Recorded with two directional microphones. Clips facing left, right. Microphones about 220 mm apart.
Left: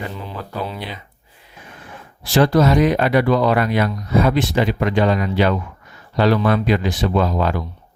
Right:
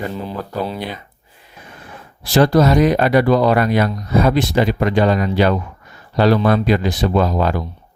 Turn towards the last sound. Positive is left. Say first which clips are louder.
# right 2 dB
turn(degrees=-40)  # may be behind; listen again after turning